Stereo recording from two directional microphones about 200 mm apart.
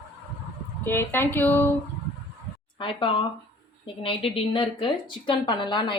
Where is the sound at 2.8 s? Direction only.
25° left (ahead or behind).